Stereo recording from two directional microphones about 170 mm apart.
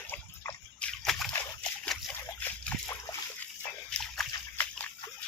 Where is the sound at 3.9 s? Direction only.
10° left (ahead or behind).